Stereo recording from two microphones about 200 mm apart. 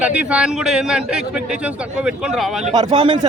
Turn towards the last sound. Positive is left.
turn(degrees=-25)  # may be behind; listen again after turning